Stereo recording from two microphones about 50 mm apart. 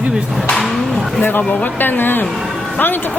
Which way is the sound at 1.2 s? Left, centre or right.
Left.